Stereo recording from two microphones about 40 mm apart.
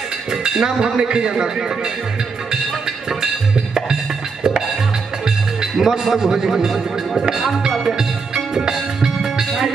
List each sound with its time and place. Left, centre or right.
0.3 s speech: centre
3.7 s music: centre
5.2 s a man's voice: centre
8.5 s music: centre